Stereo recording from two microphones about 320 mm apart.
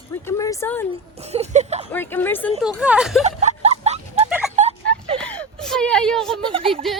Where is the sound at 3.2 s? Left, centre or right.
Right.